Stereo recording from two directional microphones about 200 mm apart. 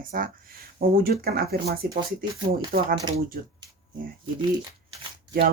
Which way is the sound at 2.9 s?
20° right (ahead or behind).